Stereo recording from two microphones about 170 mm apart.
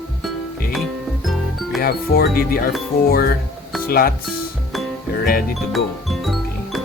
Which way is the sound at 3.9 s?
60° left (ahead or behind).